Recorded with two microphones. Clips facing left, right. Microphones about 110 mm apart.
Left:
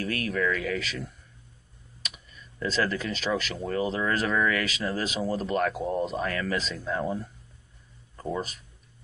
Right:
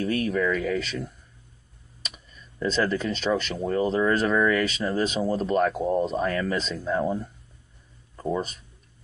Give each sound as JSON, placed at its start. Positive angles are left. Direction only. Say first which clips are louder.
{"t": 0.0, "sound": "speech", "louder": "right 4 dB", "side_deg": 0}